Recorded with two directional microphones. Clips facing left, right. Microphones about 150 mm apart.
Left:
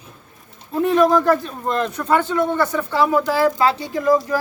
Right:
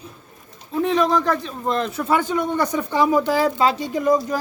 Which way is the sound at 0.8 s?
5° left (ahead or behind).